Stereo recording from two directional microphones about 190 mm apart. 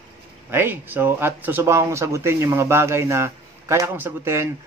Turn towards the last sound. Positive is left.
turn(degrees=-15)  # may be behind; listen again after turning